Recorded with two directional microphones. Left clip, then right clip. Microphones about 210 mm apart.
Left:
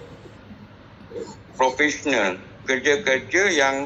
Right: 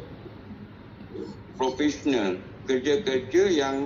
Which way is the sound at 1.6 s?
15° left (ahead or behind).